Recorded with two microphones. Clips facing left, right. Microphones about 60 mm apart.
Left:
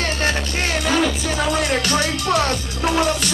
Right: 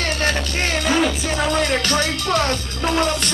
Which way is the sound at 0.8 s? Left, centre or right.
Centre.